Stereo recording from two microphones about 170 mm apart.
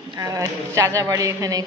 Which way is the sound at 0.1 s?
20° right (ahead or behind).